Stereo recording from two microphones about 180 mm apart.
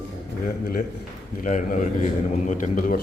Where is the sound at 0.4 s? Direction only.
50° left (ahead or behind).